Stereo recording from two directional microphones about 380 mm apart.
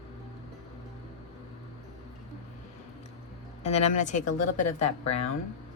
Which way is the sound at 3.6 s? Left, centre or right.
Centre.